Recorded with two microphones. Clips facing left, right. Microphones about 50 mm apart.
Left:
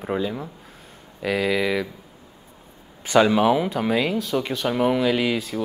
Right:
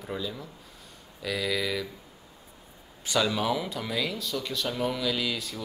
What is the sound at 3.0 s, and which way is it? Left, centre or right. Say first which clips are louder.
Speech: left 10 dB; left.